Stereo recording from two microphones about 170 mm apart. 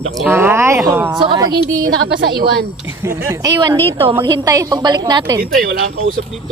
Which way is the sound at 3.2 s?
20° right (ahead or behind).